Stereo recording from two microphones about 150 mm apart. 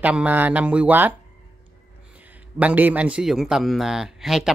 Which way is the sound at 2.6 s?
10° right (ahead or behind).